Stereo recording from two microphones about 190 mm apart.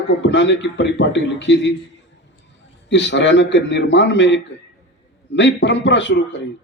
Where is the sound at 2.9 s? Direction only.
65° left (ahead or behind).